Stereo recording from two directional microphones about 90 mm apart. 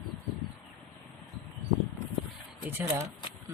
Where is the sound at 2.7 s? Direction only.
20° right (ahead or behind).